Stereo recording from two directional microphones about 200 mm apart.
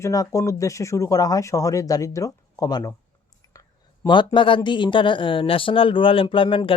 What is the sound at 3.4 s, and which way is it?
Whispering, 20° left (ahead or behind).